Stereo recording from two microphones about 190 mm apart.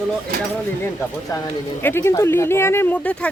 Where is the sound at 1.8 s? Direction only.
10° left (ahead or behind).